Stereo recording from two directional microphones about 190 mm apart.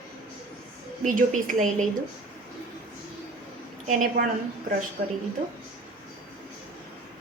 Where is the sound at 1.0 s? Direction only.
45° right (ahead or behind).